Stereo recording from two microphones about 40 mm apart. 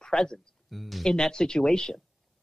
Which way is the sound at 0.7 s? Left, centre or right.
Centre.